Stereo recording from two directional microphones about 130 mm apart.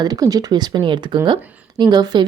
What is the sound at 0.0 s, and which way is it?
A woman's voice, 30° right (ahead or behind).